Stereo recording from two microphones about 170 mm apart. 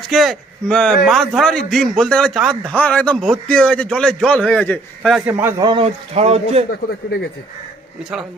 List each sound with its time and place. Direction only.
0.0 s speech: centre (ahead or behind)
5.1 s a man's voice: 10° right (ahead or behind)
5.6 s a man's voice: 30° right (ahead or behind)